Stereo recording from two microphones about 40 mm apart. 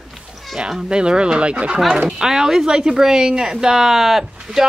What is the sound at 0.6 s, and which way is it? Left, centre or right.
A woman's voice, right.